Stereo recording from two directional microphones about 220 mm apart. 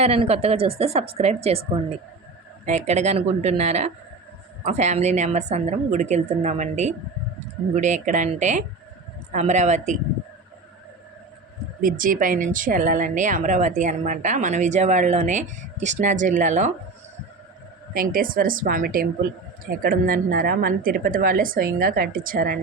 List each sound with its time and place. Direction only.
0.0 s a woman's voice: 30° right (ahead or behind)
11.8 s a woman's voice: 40° right (ahead or behind)
17.9 s a woman's voice: 40° right (ahead or behind)